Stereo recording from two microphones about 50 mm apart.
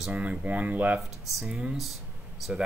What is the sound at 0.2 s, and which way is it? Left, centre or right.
Speech, right.